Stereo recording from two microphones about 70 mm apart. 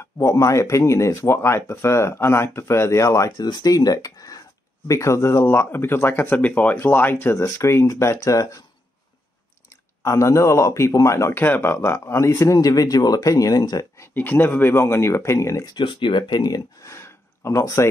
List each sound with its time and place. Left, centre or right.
0.2 s speech: left
3.3 s speech: left
4.8 s speech: left
5.5 s speech: left
6.3 s speech: left
7.4 s speech: left
8.2 s speech: left
10.0 s speech: left
11.3 s speech: left
14.1 s speech: left
16.3 s speech: left
16.8 s a sound: left